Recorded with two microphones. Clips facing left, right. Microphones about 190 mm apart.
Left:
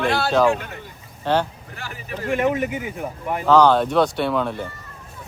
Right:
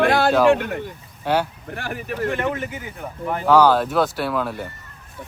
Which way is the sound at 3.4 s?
10° right (ahead or behind).